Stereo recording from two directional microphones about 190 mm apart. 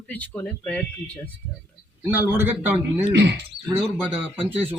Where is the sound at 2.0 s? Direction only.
10° right (ahead or behind).